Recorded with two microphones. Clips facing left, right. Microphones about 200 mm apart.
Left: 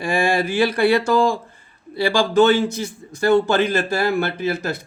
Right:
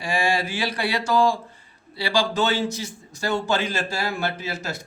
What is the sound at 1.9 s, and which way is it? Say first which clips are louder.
A man's voice: left 5 dB; 50° left (ahead or behind).